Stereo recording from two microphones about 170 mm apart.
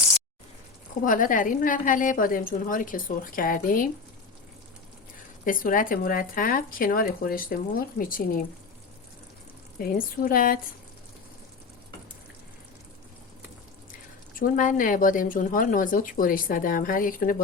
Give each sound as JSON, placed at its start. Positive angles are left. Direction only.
{"t": 1.0, "sound": "speech", "side_deg": 50}
{"t": 5.5, "sound": "speech", "side_deg": 55}
{"t": 9.7, "sound": "speech", "side_deg": 55}
{"t": 14.3, "sound": "speech", "side_deg": 50}